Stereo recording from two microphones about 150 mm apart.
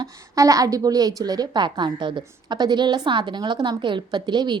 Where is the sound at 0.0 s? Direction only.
20° right (ahead or behind).